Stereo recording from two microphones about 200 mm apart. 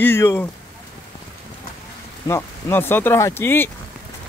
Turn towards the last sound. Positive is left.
turn(degrees=10)  # may be behind; listen again after turning